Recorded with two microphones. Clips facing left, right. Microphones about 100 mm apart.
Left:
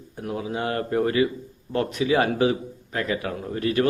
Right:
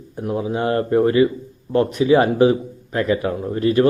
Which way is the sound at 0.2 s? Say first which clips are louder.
Right 6 dB; 30° right (ahead or behind).